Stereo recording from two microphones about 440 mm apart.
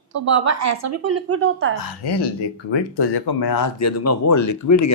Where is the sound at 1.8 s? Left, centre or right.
Left.